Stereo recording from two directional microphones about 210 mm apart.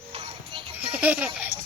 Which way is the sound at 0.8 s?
10° right (ahead or behind).